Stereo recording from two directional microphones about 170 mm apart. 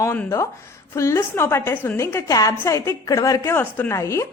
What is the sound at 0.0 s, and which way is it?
A woman's voice, 15° left (ahead or behind).